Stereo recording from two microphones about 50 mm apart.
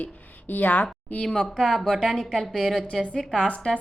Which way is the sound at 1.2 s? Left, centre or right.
Centre.